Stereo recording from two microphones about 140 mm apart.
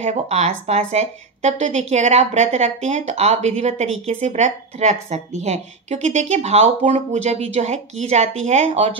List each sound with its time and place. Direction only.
0.0 s a woman's voice: 55° right (ahead or behind)